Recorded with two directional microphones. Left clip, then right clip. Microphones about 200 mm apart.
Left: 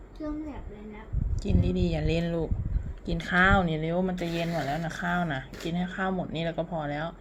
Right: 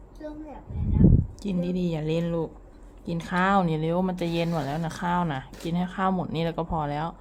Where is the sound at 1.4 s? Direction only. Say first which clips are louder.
Even; 20° right (ahead or behind).